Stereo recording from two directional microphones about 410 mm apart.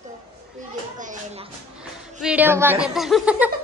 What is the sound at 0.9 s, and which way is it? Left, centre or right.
Speech, centre.